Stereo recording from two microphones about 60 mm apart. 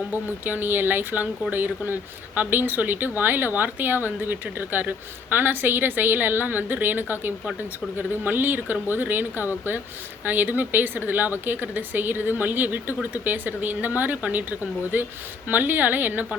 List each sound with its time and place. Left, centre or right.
0.1 s speech: right